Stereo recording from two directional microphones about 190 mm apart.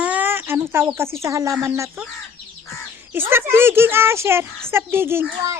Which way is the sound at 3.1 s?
10° right (ahead or behind).